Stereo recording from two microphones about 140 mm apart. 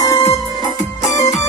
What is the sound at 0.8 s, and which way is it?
Music, 55° left (ahead or behind).